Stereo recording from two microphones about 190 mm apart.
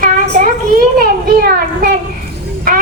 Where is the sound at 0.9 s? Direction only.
50° right (ahead or behind).